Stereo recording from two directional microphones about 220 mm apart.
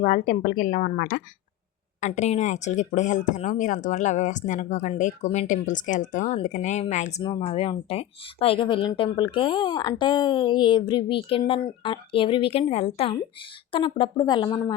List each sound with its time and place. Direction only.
0.0 s speech: 35° left (ahead or behind)
7.2 s speech: 20° left (ahead or behind)